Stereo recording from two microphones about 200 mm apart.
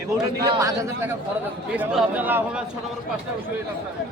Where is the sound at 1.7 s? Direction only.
5° right (ahead or behind).